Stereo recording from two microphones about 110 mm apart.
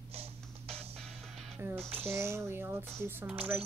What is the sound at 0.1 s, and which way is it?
Music, 65° right (ahead or behind).